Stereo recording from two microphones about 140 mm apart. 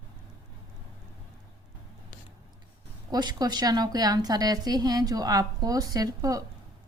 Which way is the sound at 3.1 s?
30° right (ahead or behind).